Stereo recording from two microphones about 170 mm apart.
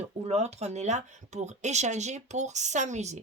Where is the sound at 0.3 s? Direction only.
40° right (ahead or behind).